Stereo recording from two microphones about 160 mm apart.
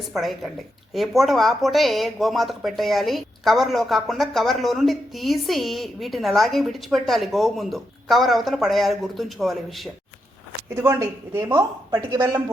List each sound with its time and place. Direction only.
0.1 s speech: centre (ahead or behind)
10.7 s a woman's voice: 15° right (ahead or behind)